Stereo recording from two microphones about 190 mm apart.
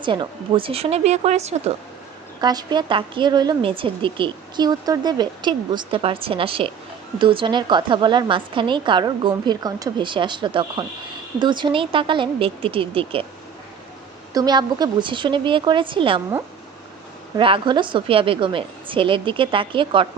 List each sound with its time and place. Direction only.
0.0 s speech: 25° right (ahead or behind)
2.4 s a woman's voice: 20° right (ahead or behind)
14.3 s a woman's voice: 20° right (ahead or behind)
17.3 s a woman's voice: 25° right (ahead or behind)